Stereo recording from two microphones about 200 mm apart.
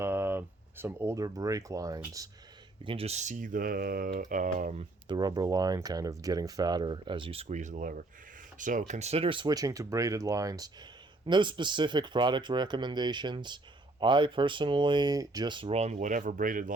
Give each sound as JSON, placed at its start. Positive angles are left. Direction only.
{"t": 0.0, "sound": "speech", "side_deg": -10}
{"t": 2.8, "sound": "speech", "side_deg": -30}